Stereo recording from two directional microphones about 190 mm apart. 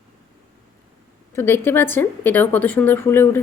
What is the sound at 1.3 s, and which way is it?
A woman's voice, 10° left (ahead or behind).